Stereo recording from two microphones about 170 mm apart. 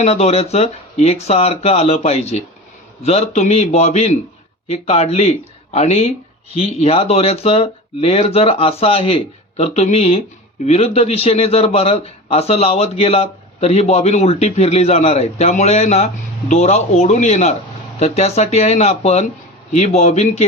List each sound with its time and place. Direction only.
0.0 s a man's voice: 40° left (ahead or behind)